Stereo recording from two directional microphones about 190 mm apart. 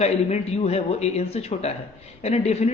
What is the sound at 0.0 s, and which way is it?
A woman's voice, 35° left (ahead or behind).